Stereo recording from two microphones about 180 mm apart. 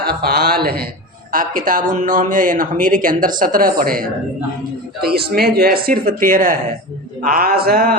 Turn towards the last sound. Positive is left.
turn(degrees=-55)  # may be behind; listen again after turning